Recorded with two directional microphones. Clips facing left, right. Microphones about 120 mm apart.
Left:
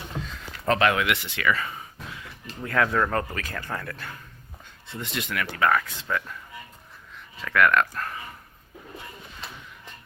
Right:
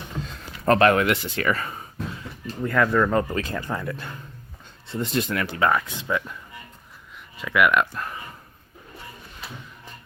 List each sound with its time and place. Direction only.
0.2 s a sound: 40° right (ahead or behind)
2.6 s speech: centre (ahead or behind)
3.1 s speech: 15° right (ahead or behind)
4.9 s speech: 35° right (ahead or behind); by 6.3 s 15° right (ahead or behind)
7.3 s speech: 10° right (ahead or behind)
9.4 s music: 5° right (ahead or behind)